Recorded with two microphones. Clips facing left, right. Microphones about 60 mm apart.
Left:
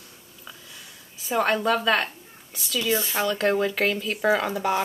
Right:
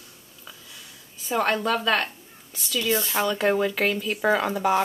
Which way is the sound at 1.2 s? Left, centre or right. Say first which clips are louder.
Left 1 dB; centre.